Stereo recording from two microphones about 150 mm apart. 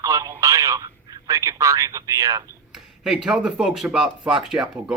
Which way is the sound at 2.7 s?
5° right (ahead or behind).